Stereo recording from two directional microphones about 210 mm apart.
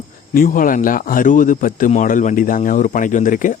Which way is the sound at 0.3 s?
40° left (ahead or behind).